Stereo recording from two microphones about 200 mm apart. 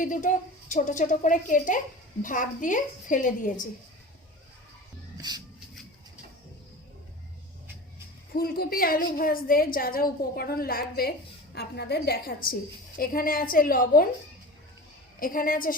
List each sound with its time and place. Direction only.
0.0 s a woman's voice: 40° left (ahead or behind)
5.1 s shuffle: 20° right (ahead or behind)
8.3 s a woman's voice: 45° left (ahead or behind)
15.2 s a woman's voice: 45° left (ahead or behind)